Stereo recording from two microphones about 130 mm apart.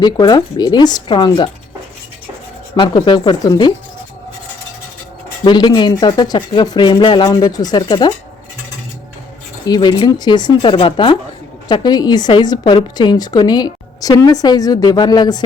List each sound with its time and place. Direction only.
0.0 s a woman's voice: 30° left (ahead or behind)
2.7 s a woman's voice: 40° left (ahead or behind)
5.5 s a woman's voice: 35° left (ahead or behind)
9.6 s a woman's voice: 30° left (ahead or behind)